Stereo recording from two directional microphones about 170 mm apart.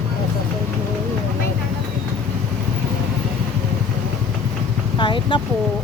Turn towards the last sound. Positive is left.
turn(degrees=30)  # may be behind; listen again after turning